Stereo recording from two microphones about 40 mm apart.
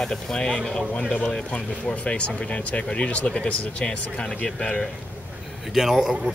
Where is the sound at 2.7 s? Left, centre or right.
Left.